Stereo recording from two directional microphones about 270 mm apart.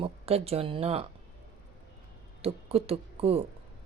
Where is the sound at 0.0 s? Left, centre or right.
Right.